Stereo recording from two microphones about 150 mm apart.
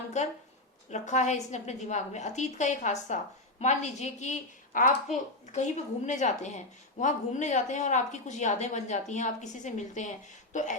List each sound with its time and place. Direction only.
0.1 s speech: 50° left (ahead or behind)